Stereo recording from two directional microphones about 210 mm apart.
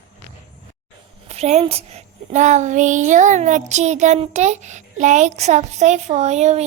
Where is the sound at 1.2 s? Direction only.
30° right (ahead or behind).